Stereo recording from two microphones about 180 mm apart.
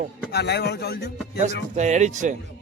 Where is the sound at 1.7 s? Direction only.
40° right (ahead or behind).